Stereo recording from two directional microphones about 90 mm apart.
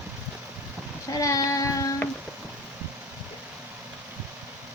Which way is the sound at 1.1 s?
40° left (ahead or behind).